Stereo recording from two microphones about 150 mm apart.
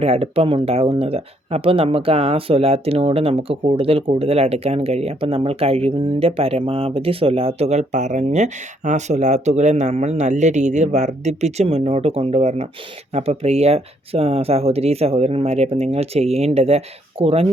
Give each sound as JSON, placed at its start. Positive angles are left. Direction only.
{"t": 0.0, "sound": "speech", "side_deg": -40}